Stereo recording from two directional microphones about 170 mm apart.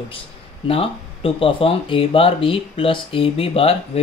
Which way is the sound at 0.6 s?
35° left (ahead or behind).